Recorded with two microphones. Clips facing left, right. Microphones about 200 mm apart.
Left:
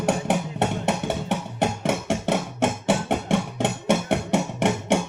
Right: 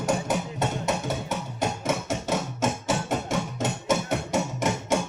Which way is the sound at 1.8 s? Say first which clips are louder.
Left 3 dB; 70° left (ahead or behind).